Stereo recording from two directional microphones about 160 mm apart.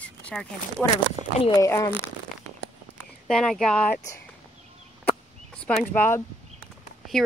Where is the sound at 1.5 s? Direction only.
20° left (ahead or behind).